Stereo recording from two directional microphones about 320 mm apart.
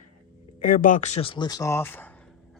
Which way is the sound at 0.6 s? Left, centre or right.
Left.